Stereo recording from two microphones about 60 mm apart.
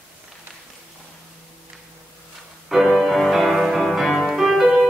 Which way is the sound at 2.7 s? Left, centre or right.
Centre.